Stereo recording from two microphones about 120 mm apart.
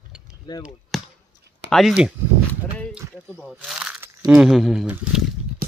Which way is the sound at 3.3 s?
5° right (ahead or behind).